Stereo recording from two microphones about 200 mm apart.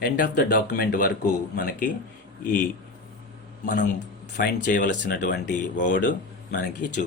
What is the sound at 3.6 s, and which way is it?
A man's voice, 40° left (ahead or behind).